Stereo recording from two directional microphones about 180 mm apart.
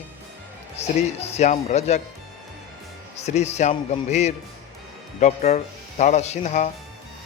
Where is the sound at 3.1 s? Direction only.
40° left (ahead or behind).